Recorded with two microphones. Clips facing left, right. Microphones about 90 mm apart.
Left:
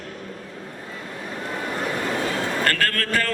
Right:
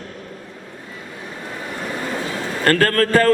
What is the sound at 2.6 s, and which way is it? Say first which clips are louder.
Speech: right 7 dB; 35° right (ahead or behind).